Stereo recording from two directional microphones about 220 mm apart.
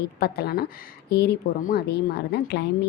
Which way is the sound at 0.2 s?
45° left (ahead or behind).